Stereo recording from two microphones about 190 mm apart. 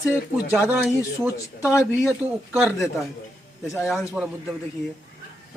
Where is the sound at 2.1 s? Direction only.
10° right (ahead or behind).